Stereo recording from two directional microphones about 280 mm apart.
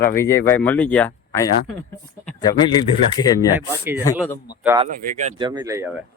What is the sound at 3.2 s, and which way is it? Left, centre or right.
Speech, centre.